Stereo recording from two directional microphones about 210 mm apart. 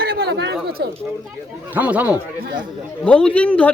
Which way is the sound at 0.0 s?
45° right (ahead or behind).